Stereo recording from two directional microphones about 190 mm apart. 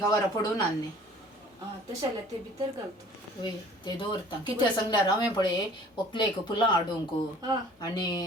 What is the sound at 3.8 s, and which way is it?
Speech, 25° left (ahead or behind).